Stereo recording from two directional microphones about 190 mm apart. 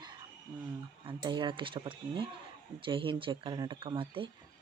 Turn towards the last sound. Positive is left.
turn(degrees=-25)  # may be behind; listen again after turning